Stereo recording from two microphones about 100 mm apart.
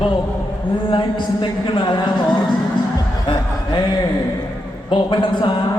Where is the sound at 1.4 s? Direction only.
50° left (ahead or behind).